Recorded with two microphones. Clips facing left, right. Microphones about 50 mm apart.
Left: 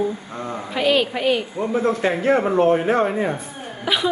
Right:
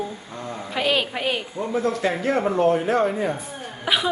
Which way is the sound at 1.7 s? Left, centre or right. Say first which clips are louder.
Left 2 dB; left.